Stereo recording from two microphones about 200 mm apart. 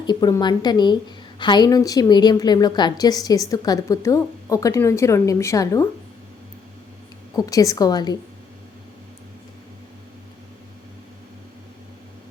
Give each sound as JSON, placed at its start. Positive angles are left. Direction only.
{"t": 0.0, "sound": "a woman's voice", "side_deg": 20}
{"t": 7.3, "sound": "a woman's voice", "side_deg": 15}